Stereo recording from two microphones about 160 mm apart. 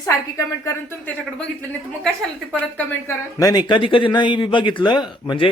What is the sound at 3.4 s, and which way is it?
Speech, 25° left (ahead or behind).